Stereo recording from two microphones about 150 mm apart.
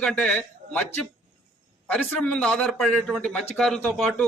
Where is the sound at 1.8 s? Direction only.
10° left (ahead or behind).